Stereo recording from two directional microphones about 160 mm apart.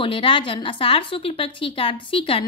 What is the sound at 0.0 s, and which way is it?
A woman's voice, 30° left (ahead or behind).